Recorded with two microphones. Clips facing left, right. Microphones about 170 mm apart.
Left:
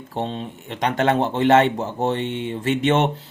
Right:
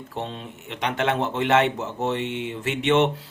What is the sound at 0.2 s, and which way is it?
Speech, 30° left (ahead or behind).